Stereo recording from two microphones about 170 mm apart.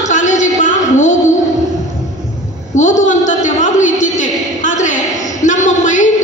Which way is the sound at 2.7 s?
45° left (ahead or behind).